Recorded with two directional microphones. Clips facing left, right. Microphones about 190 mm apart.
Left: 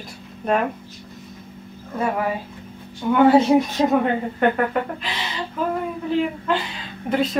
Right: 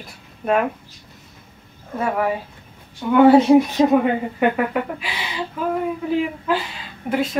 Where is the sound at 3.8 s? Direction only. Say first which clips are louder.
Right 3 dB; centre (ahead or behind).